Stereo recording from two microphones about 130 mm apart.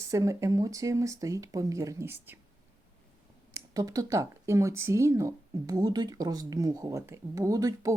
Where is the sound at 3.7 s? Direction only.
30° right (ahead or behind).